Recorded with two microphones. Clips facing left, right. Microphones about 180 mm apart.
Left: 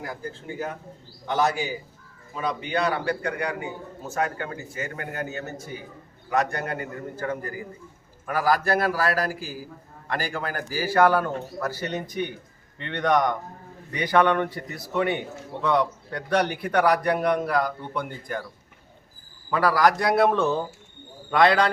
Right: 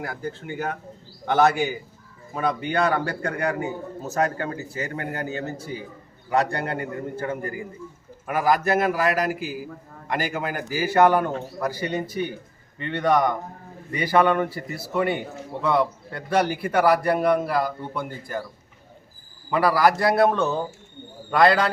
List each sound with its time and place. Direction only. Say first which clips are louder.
0.0 s a man's voice: right 3 dB; 70° right (ahead or behind); by 18.4 s 5° right (ahead or behind)
19.5 s a man's voice: right 1 dB; 10° right (ahead or behind)